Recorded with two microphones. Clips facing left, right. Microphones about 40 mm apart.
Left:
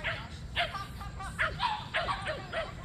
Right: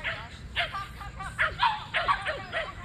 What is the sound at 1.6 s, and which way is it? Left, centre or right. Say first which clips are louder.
Dog: right 5 dB; right.